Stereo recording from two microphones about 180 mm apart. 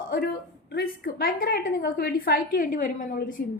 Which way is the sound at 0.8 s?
55° left (ahead or behind).